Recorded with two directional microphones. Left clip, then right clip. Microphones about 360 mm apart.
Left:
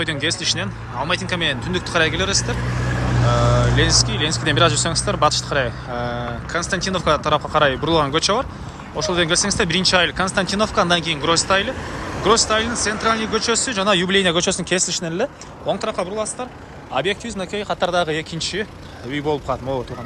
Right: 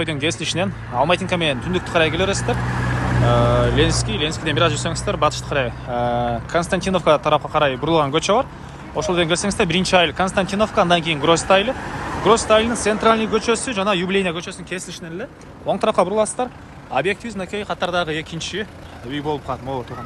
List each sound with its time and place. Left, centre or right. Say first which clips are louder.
0.0 s speech: left 1 dB; centre
3.0 s vehicle: right 1 dB; right
3.2 s speech: right 2 dB; centre